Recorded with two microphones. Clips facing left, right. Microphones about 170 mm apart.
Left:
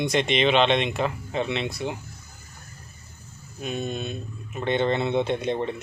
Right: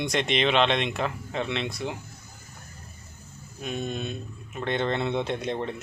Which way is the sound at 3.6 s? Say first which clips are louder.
Left 2 dB; centre (ahead or behind).